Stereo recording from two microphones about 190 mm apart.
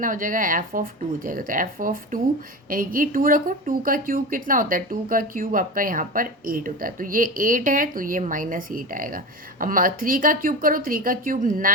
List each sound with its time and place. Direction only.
0.0 s speech: 45° right (ahead or behind)